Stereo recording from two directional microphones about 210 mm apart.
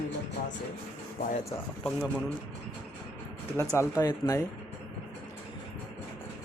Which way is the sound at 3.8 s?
20° left (ahead or behind).